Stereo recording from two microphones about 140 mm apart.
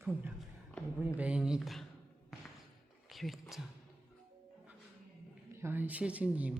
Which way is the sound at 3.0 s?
Centre (ahead or behind).